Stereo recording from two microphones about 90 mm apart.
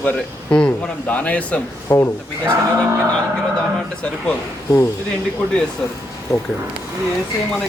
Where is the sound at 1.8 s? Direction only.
35° left (ahead or behind).